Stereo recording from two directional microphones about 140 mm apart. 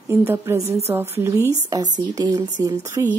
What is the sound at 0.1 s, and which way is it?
Speech, 15° right (ahead or behind).